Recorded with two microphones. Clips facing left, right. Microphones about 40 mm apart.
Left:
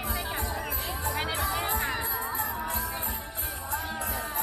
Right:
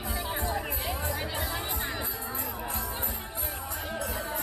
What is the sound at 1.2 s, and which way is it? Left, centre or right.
Music, left.